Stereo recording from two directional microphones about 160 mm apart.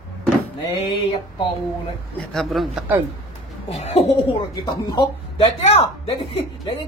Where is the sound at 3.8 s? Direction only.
40° left (ahead or behind).